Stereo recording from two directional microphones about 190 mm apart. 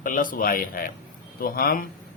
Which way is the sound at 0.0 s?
45° left (ahead or behind).